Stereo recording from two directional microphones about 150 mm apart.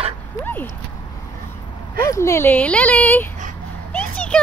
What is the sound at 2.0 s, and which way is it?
Speech, 20° left (ahead or behind).